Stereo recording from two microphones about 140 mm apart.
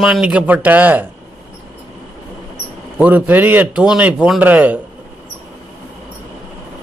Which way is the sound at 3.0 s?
10° right (ahead or behind).